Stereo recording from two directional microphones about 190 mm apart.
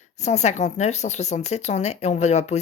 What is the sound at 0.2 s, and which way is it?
Speech, 35° left (ahead or behind).